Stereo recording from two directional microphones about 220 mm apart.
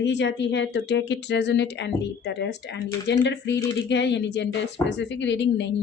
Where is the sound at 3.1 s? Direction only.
50° left (ahead or behind).